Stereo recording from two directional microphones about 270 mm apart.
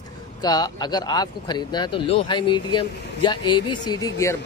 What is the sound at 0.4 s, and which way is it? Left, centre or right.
Speech, centre.